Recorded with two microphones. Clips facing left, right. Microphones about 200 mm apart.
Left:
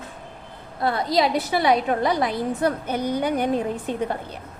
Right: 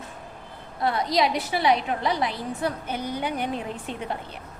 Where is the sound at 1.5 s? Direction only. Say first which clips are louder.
Left 3 dB; 45° left (ahead or behind).